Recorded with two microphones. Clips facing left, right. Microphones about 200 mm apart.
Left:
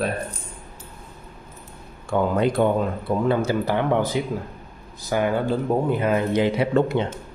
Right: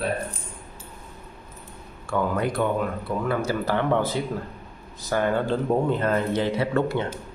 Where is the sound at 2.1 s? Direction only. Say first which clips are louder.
Left 4 dB; 25° left (ahead or behind).